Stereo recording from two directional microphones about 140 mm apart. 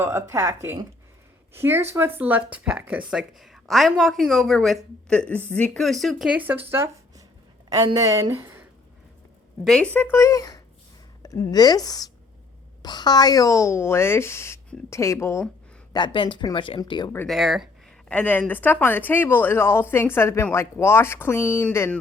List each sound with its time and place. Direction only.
0.0 s a woman's voice: 20° right (ahead or behind)
7.7 s a woman's voice: 30° right (ahead or behind)
9.6 s a woman's voice: 5° left (ahead or behind)
15.9 s speech: 35° left (ahead or behind)
17.2 s speech: centre (ahead or behind)
18.1 s a woman's voice: 10° left (ahead or behind)